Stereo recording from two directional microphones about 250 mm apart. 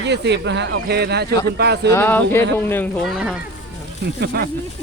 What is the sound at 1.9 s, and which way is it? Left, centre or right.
Speech, centre.